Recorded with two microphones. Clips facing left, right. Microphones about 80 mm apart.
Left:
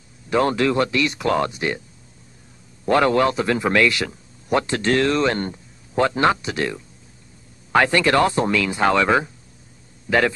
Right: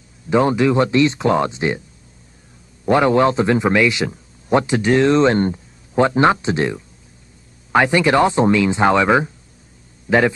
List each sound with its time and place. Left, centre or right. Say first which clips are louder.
0.3 s speech: right 3 dB; centre
2.8 s a man's voice: right 3 dB; centre